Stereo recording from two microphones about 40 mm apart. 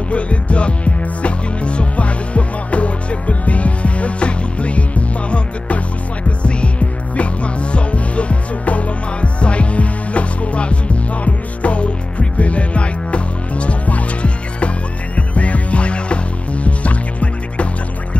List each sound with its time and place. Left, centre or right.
0.1 s music: left